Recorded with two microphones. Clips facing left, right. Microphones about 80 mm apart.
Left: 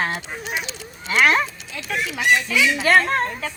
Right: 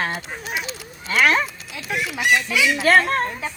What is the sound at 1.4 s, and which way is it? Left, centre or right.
Speech, centre.